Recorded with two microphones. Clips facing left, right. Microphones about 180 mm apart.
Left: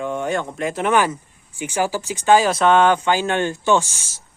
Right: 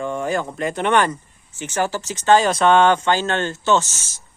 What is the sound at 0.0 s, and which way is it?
Speech, centre (ahead or behind).